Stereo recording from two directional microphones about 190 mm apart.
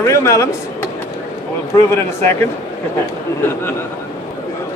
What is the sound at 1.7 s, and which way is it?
Speech, 15° left (ahead or behind).